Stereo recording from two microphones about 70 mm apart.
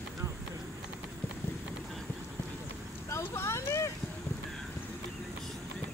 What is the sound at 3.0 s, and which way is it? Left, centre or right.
Vehicle, left.